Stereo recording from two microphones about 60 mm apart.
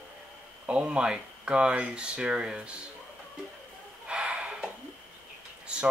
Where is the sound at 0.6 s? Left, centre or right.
Right.